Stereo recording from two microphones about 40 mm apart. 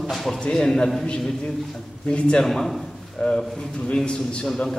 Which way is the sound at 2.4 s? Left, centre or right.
Centre.